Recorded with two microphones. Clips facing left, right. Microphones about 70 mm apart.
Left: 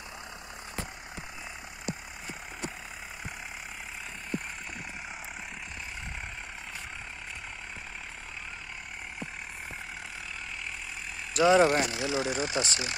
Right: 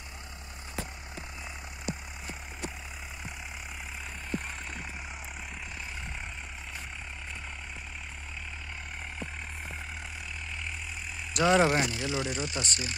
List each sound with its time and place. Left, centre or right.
11.3 s speech: centre
12.0 s speech: centre
12.3 s speech: left